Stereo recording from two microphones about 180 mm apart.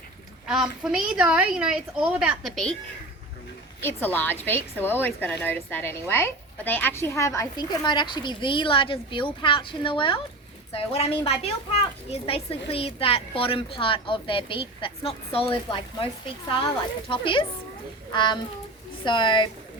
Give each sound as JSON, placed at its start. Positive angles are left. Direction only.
{"t": 0.4, "sound": "a woman's voice", "side_deg": -5}
{"t": 3.8, "sound": "a woman's voice", "side_deg": 10}